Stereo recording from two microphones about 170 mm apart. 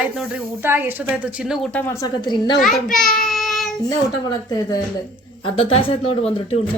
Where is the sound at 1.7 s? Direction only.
15° left (ahead or behind).